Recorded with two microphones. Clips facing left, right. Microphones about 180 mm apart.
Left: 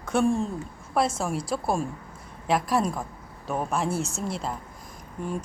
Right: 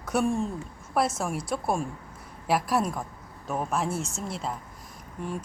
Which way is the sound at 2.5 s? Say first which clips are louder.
Left 1 dB; 5° right (ahead or behind).